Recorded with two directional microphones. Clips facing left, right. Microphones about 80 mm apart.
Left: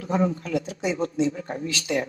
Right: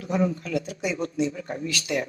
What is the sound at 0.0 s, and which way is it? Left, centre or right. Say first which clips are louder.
Speech: left 1 dB; left.